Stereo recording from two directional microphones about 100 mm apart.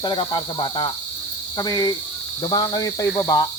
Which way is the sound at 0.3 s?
50° left (ahead or behind).